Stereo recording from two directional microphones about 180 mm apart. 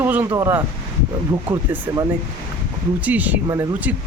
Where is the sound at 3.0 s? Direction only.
10° right (ahead or behind).